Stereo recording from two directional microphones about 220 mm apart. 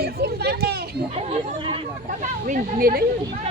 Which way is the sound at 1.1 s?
25° right (ahead or behind).